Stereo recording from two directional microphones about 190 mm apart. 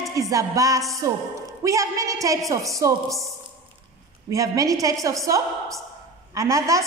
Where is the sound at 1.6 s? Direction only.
15° right (ahead or behind).